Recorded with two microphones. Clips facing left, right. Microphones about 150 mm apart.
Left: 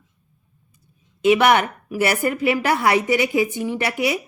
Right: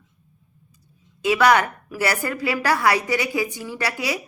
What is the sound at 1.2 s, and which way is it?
A woman's voice, 25° left (ahead or behind).